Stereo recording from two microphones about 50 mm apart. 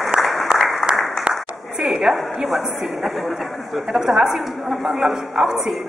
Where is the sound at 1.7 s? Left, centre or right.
Centre.